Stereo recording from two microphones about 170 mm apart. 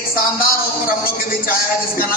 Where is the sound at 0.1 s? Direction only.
60° left (ahead or behind).